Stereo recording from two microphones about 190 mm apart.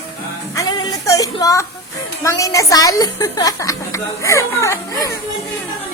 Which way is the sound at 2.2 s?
15° left (ahead or behind).